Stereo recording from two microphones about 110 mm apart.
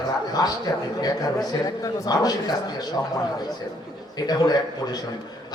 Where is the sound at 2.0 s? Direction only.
35° left (ahead or behind).